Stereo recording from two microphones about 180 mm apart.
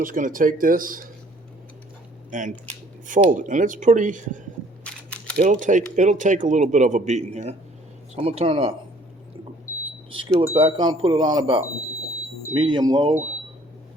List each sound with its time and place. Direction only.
0.0 s speech: 50° right (ahead or behind)
2.3 s speech: 45° right (ahead or behind)
4.8 s camera: 5° left (ahead or behind)
5.4 s speech: 45° right (ahead or behind); by 8.7 s 30° right (ahead or behind)
10.2 s speech: 30° right (ahead or behind)